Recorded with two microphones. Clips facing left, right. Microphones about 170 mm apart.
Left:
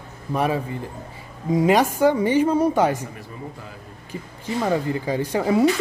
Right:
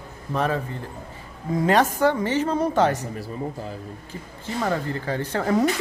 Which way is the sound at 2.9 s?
35° right (ahead or behind).